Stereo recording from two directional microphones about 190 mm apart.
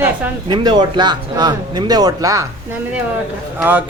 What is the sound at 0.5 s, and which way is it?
Speech, 25° right (ahead or behind).